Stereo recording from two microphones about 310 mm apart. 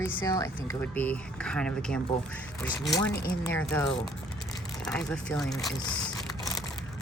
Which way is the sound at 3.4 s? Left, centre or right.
Centre.